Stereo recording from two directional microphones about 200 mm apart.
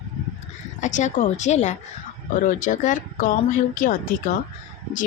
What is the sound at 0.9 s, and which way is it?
A woman's voice, 35° left (ahead or behind).